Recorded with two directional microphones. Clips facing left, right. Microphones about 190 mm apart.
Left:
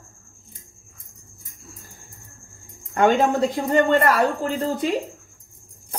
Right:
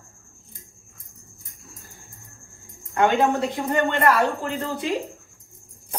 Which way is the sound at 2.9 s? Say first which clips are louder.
Left 2 dB; 40° left (ahead or behind).